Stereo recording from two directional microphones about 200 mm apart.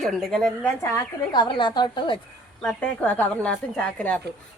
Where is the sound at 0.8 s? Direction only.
15° left (ahead or behind).